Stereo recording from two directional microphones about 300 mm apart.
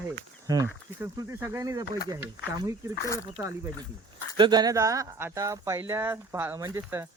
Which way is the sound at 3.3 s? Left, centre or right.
Centre.